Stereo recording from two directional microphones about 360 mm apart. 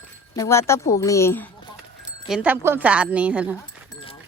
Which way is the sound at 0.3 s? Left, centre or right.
Centre.